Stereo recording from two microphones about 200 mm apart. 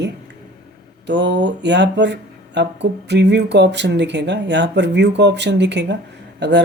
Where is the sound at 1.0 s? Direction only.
60° right (ahead or behind).